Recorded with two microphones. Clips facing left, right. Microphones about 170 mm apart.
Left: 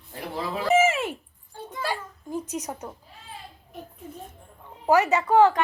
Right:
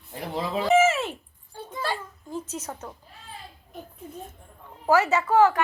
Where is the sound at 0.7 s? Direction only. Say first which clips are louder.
Right 1 dB; 10° left (ahead or behind).